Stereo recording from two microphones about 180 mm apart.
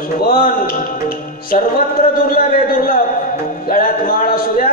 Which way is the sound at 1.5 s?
50° left (ahead or behind).